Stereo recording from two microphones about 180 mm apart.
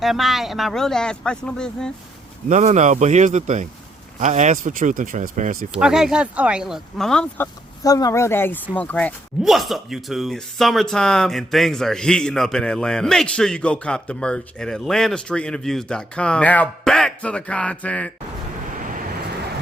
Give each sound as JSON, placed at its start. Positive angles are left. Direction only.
{"t": 0.0, "sound": "speech", "side_deg": 0}
{"t": 2.5, "sound": "speech", "side_deg": -40}
{"t": 5.7, "sound": "speech", "side_deg": -5}
{"t": 7.9, "sound": "speech", "side_deg": 20}